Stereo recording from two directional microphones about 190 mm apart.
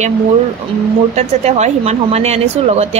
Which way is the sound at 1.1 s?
35° right (ahead or behind).